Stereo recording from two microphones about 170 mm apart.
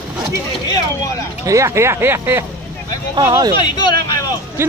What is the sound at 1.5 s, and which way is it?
Speech, 15° right (ahead or behind).